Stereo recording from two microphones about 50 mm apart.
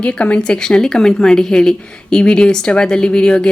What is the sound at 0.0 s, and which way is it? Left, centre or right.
A woman's voice, left.